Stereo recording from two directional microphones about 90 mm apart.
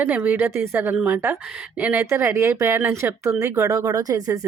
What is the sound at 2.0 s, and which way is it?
Speech, 30° right (ahead or behind).